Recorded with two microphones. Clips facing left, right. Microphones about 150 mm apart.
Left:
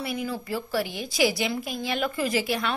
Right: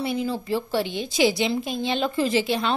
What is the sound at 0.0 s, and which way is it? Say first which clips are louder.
Speech: right 4 dB; 25° right (ahead or behind).